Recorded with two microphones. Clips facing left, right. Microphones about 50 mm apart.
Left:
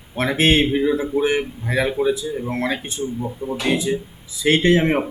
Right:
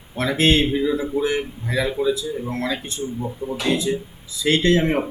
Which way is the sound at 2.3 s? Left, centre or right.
Left.